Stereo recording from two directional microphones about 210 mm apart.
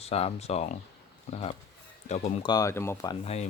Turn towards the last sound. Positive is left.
turn(degrees=15)  # may be behind; listen again after turning